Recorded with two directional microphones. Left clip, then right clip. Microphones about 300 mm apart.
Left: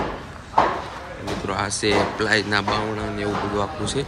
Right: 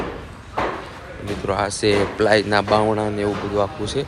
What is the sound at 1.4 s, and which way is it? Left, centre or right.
Speech, centre.